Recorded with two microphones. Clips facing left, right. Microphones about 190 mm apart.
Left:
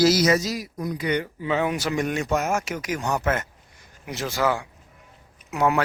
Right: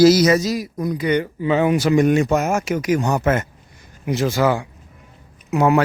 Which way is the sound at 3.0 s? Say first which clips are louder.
Right 5 dB; 30° right (ahead or behind).